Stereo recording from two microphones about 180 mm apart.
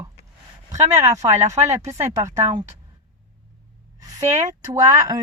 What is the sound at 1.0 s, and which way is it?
Speech, 15° right (ahead or behind).